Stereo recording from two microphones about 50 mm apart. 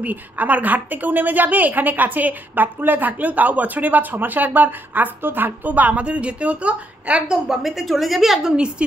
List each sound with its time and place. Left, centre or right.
0.0 s a woman's voice: right
7.2 s a woman's voice: centre
8.5 s a woman's voice: centre